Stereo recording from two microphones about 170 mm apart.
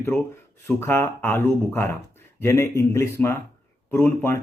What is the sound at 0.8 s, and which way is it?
Speech, 10° left (ahead or behind).